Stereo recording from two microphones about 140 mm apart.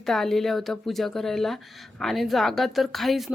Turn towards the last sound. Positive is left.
turn(degrees=0)  # may be behind; listen again after turning